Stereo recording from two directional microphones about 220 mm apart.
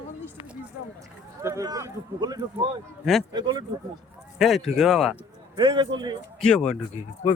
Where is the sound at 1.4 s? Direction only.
15° right (ahead or behind).